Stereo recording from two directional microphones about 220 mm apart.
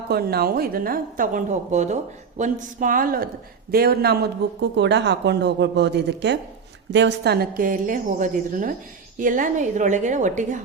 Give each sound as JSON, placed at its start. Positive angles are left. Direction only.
{"t": 0.1, "sound": "a woman's voice", "side_deg": -45}